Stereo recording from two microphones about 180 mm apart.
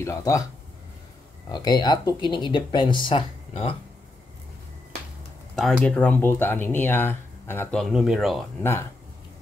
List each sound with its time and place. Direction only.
0.0 s speech: 15° left (ahead or behind)
1.5 s speech: 20° left (ahead or behind)
5.6 s speech: centre (ahead or behind)
7.8 s speech: centre (ahead or behind)